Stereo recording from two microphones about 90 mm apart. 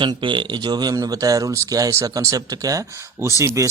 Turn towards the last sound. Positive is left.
turn(degrees=-35)  # may be behind; listen again after turning